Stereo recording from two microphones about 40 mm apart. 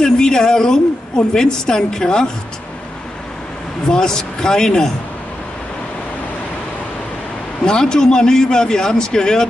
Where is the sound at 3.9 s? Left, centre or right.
Centre.